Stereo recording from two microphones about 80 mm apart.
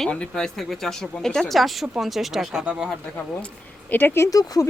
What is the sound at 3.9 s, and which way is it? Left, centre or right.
Speech, left.